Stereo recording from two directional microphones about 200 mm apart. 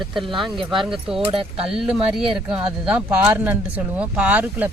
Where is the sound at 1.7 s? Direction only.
Centre (ahead or behind).